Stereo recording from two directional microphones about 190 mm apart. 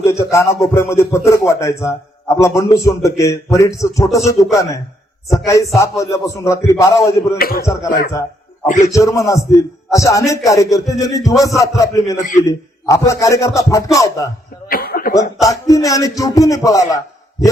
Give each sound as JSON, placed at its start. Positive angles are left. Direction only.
{"t": 0.0, "sound": "speech", "side_deg": 15}
{"t": 5.7, "sound": "speech", "side_deg": 15}
{"t": 7.3, "sound": "speech", "side_deg": 50}
{"t": 7.6, "sound": "speech", "side_deg": 15}
{"t": 7.9, "sound": "a man's voice", "side_deg": 50}
{"t": 8.9, "sound": "speech", "side_deg": 15}
{"t": 14.7, "sound": "cough", "side_deg": 50}
{"t": 15.4, "sound": "speech", "side_deg": 15}